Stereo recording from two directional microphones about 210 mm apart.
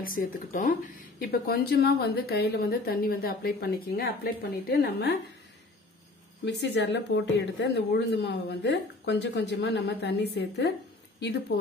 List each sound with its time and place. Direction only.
0.0 s speech: 45° left (ahead or behind)
6.4 s speech: 55° left (ahead or behind)